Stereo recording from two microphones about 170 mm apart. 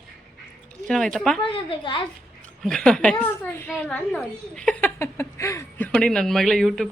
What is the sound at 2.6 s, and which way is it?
A woman's voice, 5° left (ahead or behind).